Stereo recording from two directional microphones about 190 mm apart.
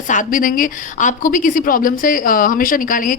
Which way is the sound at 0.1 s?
45° left (ahead or behind).